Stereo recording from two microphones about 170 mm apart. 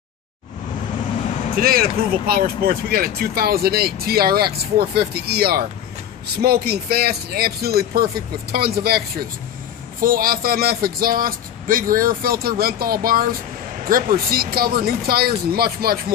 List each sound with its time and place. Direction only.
1.6 s speech: 60° right (ahead or behind)